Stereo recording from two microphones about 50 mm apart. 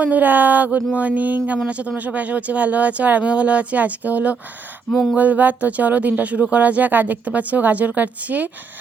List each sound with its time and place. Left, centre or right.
0.0 s speech: right
4.9 s a sound: centre
5.1 s speech: right